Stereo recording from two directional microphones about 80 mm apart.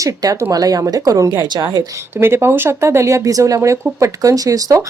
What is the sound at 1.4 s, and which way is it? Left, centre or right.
Speech, right.